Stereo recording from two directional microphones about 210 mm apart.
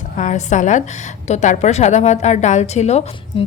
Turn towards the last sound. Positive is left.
turn(degrees=25)  # may be behind; listen again after turning